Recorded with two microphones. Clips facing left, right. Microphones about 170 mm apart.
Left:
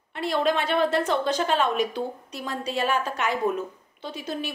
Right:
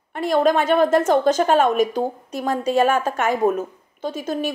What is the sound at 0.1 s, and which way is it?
A woman's voice, 45° right (ahead or behind).